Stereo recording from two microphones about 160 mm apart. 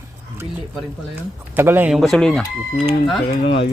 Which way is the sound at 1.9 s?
Centre (ahead or behind).